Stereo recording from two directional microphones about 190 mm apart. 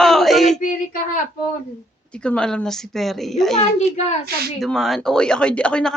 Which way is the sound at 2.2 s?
5° left (ahead or behind).